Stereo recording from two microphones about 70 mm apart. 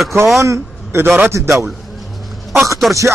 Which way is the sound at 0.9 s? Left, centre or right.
Right.